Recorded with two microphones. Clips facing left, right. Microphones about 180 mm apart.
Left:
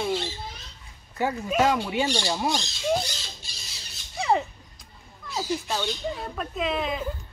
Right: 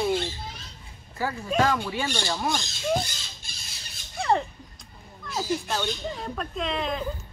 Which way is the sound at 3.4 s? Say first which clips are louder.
Even; 50° right (ahead or behind).